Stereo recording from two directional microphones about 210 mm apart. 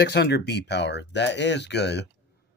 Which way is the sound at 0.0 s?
50° left (ahead or behind).